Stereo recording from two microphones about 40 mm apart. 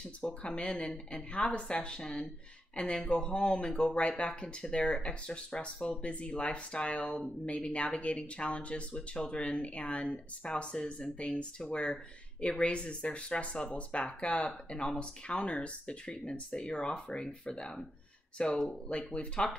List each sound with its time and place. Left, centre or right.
0.2 s speech: left
16.5 s speech: left